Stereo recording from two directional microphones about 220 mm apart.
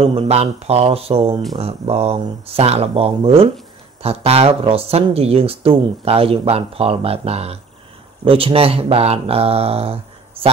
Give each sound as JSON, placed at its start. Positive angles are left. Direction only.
{"t": 0.0, "sound": "speech", "side_deg": -25}